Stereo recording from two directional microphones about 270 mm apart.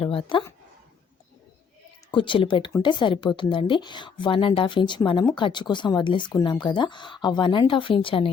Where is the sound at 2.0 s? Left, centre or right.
Centre.